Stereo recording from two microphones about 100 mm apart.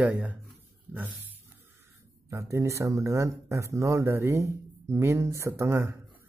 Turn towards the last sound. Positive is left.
turn(degrees=-25)  # may be behind; listen again after turning